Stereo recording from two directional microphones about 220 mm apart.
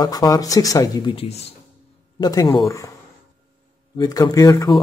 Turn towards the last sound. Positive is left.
turn(degrees=15)  # may be behind; listen again after turning